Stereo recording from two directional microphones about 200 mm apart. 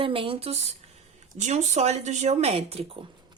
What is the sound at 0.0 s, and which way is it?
A woman's voice, 25° right (ahead or behind).